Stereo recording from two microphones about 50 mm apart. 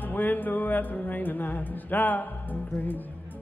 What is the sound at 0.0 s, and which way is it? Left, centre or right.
Music, left.